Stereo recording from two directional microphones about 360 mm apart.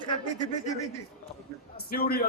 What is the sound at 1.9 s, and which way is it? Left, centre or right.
Speech, left.